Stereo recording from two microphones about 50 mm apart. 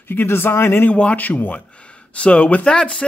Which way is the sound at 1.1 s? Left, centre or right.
Left.